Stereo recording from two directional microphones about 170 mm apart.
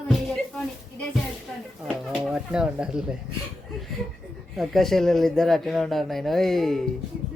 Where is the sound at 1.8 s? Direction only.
Centre (ahead or behind).